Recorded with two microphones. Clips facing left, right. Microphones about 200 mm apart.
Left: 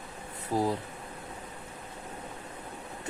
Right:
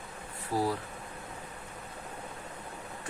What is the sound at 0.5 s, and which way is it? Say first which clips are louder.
Speech: left 2 dB; 20° left (ahead or behind).